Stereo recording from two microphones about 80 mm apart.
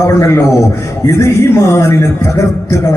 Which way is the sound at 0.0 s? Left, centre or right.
Left.